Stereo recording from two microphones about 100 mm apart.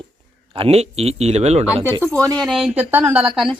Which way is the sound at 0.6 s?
90° right.